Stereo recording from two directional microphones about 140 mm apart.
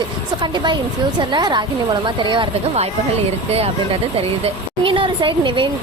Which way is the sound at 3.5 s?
45° right (ahead or behind).